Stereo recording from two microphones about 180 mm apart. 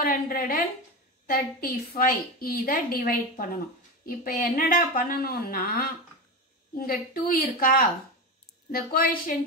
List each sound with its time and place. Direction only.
0.0 s a woman's voice: 55° left (ahead or behind)